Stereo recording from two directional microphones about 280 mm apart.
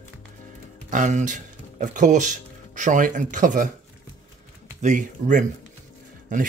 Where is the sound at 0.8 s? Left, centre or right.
Right.